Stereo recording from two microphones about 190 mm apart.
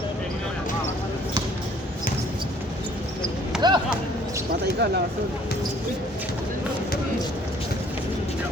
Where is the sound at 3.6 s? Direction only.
20° right (ahead or behind).